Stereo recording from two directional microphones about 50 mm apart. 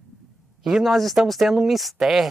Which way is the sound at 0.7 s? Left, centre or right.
Centre.